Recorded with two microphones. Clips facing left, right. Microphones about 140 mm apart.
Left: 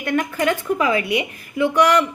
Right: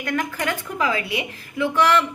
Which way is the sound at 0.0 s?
25° left (ahead or behind).